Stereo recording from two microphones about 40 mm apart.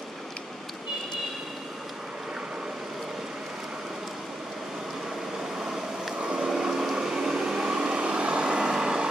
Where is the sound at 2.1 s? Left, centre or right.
Centre.